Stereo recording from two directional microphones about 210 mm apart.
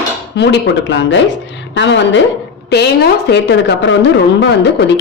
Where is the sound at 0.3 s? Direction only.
55° left (ahead or behind).